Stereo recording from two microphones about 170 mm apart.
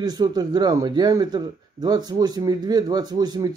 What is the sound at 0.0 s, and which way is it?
A man's voice, 25° right (ahead or behind).